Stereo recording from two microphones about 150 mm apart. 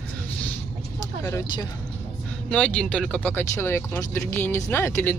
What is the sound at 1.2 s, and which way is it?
Speech, 20° left (ahead or behind).